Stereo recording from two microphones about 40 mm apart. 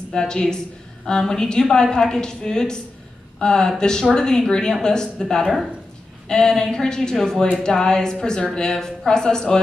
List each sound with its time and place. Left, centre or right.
0.1 s a woman's voice: centre